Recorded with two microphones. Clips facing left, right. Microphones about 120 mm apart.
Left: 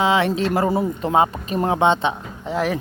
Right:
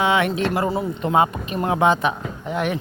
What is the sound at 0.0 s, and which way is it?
Speech, 30° left (ahead or behind).